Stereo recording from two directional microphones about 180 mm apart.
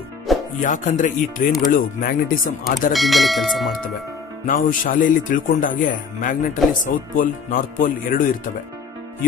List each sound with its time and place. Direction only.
0.6 s speech: 45° left (ahead or behind)
2.9 s speech: centre (ahead or behind)
4.5 s speech: 50° left (ahead or behind)